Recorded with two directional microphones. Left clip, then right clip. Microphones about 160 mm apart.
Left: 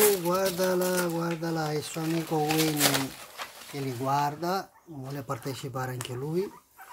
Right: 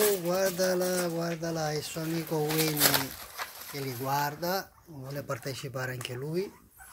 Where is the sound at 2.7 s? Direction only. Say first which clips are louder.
Left 1 dB; 25° right (ahead or behind).